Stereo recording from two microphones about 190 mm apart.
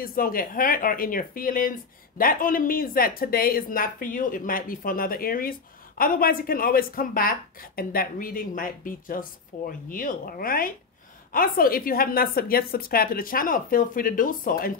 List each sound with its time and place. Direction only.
0.0 s speech: 50° left (ahead or behind)